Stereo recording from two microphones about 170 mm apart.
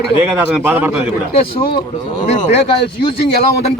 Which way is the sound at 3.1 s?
70° left (ahead or behind).